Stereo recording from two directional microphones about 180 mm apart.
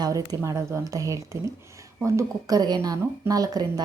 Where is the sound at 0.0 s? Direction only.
20° right (ahead or behind).